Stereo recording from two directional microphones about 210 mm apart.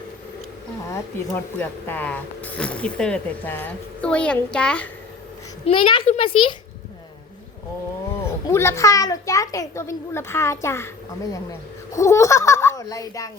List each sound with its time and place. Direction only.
0.9 s speech: 10° left (ahead or behind)
5.6 s a child's voice: 25° left (ahead or behind)
8.2 s a child's voice: 10° left (ahead or behind)